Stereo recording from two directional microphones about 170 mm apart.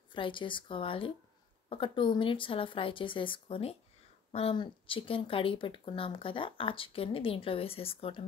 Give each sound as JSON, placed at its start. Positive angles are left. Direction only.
{"t": 0.1, "sound": "speech", "side_deg": 30}